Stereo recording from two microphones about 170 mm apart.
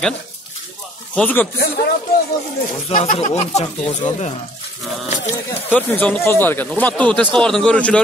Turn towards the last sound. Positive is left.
turn(degrees=5)  # may be behind; listen again after turning